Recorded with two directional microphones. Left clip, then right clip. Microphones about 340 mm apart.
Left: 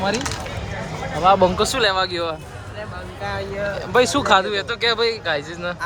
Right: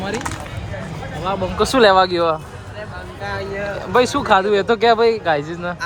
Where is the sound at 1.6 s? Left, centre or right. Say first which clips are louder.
Right 6 dB; centre.